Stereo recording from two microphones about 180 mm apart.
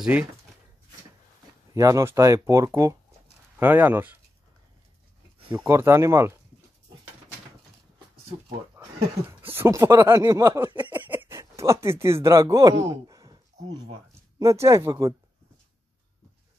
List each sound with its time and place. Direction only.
0.0 s speech: 5° right (ahead or behind)
1.7 s speech: 20° right (ahead or behind)
5.5 s speech: 10° right (ahead or behind)
8.8 s a sound: 10° right (ahead or behind)
9.4 s speech: 10° right (ahead or behind)
10.9 s speech: 10° right (ahead or behind)